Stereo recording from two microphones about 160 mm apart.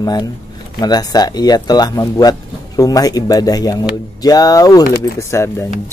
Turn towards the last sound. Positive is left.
turn(degrees=20)  # may be behind; listen again after turning